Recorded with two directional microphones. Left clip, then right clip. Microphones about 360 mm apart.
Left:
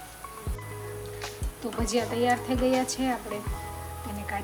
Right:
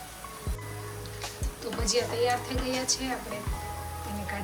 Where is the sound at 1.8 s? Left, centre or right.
Centre.